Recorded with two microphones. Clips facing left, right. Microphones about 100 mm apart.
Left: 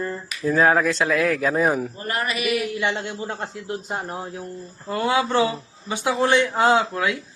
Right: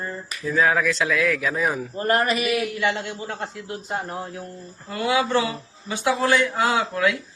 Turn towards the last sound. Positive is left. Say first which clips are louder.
# left 2 dB
turn(degrees=25)  # may be behind; listen again after turning